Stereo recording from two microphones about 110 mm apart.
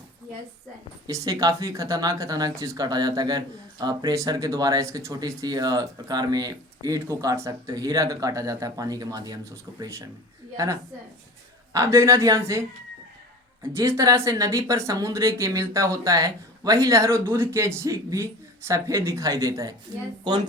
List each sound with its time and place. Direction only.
1.0 s speech: 35° right (ahead or behind)
11.7 s speech: 25° right (ahead or behind)
20.3 s speech: 40° right (ahead or behind)